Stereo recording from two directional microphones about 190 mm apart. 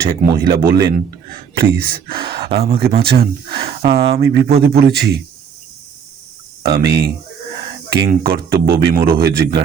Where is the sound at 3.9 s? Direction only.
55° right (ahead or behind).